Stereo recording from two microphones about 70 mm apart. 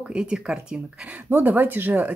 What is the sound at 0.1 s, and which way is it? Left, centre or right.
Speech, centre.